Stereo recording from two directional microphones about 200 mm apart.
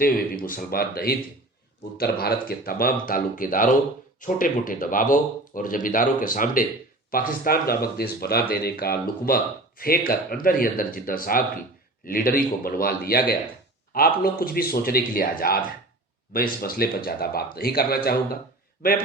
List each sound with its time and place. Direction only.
0.0 s speech: 45° left (ahead or behind)